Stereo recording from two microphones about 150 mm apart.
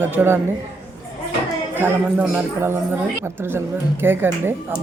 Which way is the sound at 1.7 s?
15° right (ahead or behind).